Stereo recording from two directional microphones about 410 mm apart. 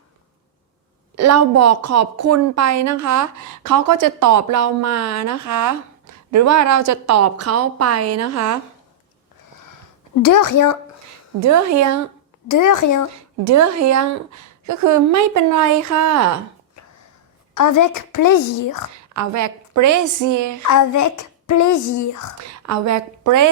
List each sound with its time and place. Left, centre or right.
1.1 s a woman's voice: right
10.2 s speech: left
11.3 s a woman's voice: right
12.5 s speech: left
13.1 s a woman's voice: right
17.5 s speech: left
19.1 s a woman's voice: right
20.7 s speech: left
22.4 s a woman's voice: right